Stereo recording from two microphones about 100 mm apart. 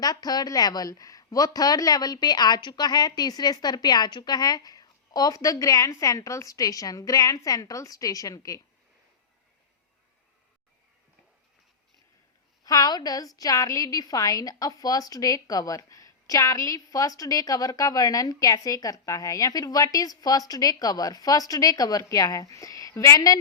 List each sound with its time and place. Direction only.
0.0 s a woman's voice: 40° left (ahead or behind)
12.6 s a woman's voice: 40° left (ahead or behind)